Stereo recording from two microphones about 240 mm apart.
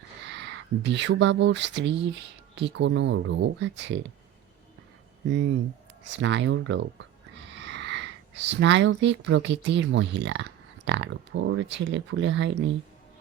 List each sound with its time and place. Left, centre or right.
0.3 s speech: right
6.1 s speech: right